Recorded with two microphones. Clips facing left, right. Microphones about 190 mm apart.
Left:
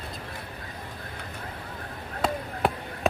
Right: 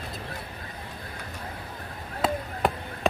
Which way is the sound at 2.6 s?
Centre (ahead or behind).